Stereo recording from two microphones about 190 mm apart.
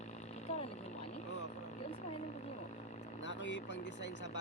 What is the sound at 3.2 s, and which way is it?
Speech, 75° left (ahead or behind).